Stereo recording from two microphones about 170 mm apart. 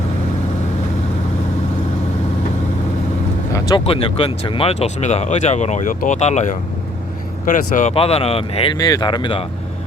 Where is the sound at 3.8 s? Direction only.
35° left (ahead or behind).